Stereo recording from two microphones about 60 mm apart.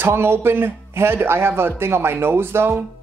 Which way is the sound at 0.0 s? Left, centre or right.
Right.